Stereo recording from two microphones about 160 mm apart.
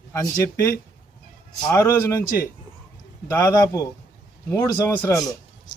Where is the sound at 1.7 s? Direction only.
15° left (ahead or behind).